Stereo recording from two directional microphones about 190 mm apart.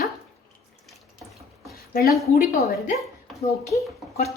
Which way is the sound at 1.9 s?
50° left (ahead or behind).